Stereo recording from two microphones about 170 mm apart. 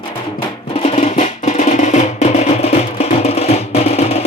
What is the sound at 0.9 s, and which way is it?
Music, 40° left (ahead or behind).